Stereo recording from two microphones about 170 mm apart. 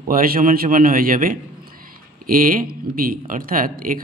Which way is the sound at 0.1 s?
55° right (ahead or behind).